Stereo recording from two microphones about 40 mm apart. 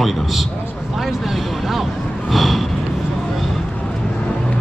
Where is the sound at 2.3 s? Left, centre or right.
Centre.